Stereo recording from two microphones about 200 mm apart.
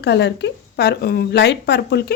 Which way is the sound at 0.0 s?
60° left (ahead or behind).